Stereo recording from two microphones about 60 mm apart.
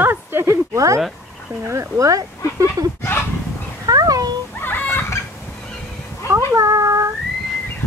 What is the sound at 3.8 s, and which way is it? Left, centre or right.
Cat, right.